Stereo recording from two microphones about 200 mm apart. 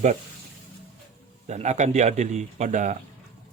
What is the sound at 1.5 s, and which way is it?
Speech, 35° right (ahead or behind).